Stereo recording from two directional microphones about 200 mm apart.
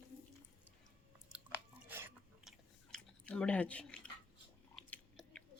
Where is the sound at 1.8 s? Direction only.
10° right (ahead or behind).